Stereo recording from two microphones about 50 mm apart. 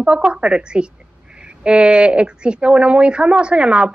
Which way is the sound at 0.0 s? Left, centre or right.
Centre.